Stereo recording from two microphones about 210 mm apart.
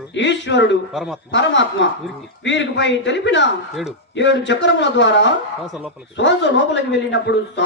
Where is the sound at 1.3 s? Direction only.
60° left (ahead or behind).